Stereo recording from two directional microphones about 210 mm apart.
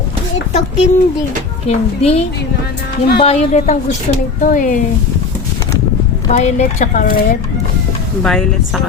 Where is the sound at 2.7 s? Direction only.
50° left (ahead or behind).